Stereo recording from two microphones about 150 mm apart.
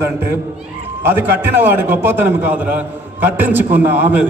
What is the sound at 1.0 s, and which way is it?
A man's voice, 15° right (ahead or behind).